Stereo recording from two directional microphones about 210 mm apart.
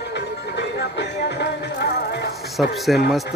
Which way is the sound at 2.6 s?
Centre (ahead or behind).